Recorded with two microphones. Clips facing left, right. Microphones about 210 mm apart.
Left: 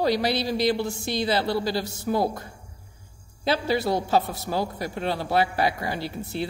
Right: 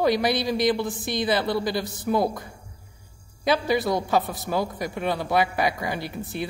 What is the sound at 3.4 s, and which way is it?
A man's voice, 15° right (ahead or behind).